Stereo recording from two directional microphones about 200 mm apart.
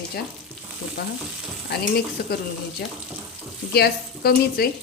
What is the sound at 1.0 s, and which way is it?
Frying, 55° left (ahead or behind).